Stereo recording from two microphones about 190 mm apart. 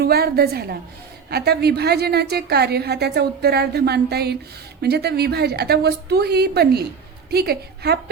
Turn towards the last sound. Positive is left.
turn(degrees=-55)  # may be behind; listen again after turning